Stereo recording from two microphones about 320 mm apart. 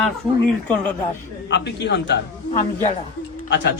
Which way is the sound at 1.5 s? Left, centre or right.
Left.